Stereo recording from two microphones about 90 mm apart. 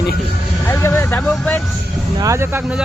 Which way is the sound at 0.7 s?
30° left (ahead or behind).